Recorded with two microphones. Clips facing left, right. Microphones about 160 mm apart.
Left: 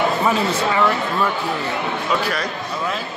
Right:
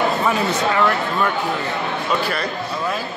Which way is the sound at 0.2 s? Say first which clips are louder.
Left 1 dB; centre (ahead or behind).